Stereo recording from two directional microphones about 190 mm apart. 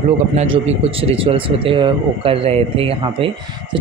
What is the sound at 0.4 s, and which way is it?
A man's voice, 30° right (ahead or behind).